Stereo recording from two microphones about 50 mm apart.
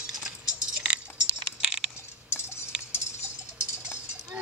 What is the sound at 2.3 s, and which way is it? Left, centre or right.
Tick-tock, left.